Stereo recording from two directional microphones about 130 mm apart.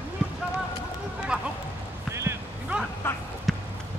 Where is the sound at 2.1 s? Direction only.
20° right (ahead or behind).